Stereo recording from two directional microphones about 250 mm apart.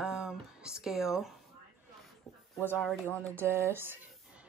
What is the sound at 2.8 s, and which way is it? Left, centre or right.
Speech, centre.